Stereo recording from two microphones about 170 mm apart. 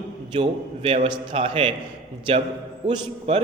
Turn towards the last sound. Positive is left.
turn(degrees=-35)  # may be behind; listen again after turning